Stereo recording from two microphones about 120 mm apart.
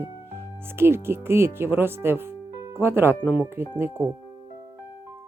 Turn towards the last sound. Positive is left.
turn(degrees=-15)  # may be behind; listen again after turning